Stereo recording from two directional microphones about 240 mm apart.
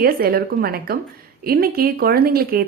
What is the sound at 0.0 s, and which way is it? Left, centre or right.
A woman's voice, right.